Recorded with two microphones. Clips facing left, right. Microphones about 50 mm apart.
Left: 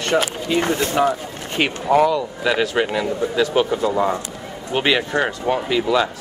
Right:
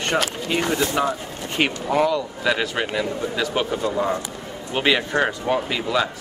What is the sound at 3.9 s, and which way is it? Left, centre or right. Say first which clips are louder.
Speech: left 3 dB; left.